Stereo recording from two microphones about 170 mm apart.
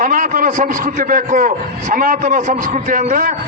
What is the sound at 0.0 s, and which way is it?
A man's voice, 50° right (ahead or behind).